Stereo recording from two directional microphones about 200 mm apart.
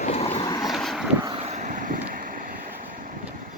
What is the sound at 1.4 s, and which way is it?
Vehicle, 40° right (ahead or behind).